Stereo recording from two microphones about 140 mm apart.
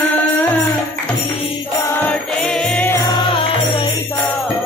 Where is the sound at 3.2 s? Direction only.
35° left (ahead or behind).